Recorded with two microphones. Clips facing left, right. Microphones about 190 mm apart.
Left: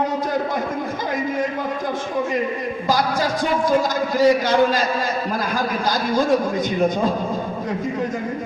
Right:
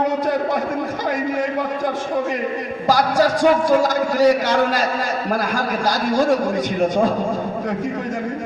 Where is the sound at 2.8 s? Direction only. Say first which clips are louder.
Right 5 dB; 75° right (ahead or behind).